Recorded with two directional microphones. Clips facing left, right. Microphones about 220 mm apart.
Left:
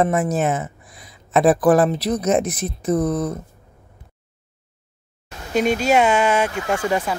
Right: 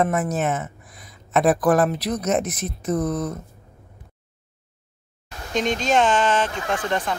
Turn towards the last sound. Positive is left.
turn(degrees=10)  # may be behind; listen again after turning